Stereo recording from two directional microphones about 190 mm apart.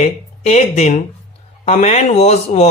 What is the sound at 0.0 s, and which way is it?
Speech, 35° left (ahead or behind).